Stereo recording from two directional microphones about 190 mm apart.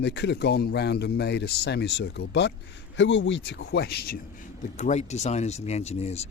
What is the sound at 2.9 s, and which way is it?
A man's voice, 75° left (ahead or behind).